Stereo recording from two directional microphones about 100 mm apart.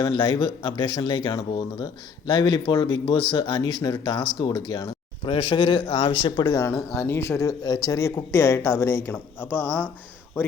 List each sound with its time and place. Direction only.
0.1 s speech: 45° left (ahead or behind)
5.2 s speech: 55° left (ahead or behind)
6.6 s speech: 25° left (ahead or behind)